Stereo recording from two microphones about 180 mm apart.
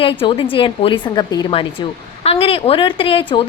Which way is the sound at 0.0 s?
30° left (ahead or behind).